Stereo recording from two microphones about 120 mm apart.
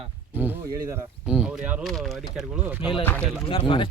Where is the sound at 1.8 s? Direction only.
Centre (ahead or behind).